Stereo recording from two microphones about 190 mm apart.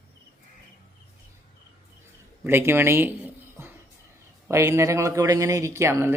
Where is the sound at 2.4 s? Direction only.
10° right (ahead or behind).